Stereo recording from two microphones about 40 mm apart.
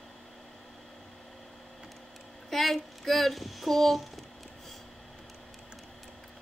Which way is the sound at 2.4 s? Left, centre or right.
Centre.